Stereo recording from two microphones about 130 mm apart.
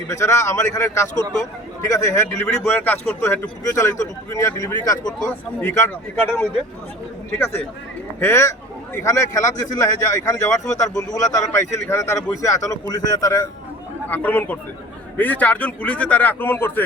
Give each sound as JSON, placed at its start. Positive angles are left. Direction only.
{"t": 0.1, "sound": "a man's voice", "side_deg": 20}
{"t": 14.1, "sound": "a man's voice", "side_deg": 15}